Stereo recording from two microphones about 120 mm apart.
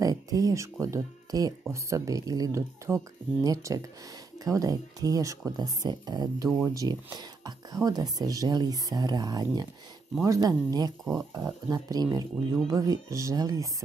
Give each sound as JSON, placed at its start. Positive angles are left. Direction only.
{"t": 0.0, "sound": "speech", "side_deg": -30}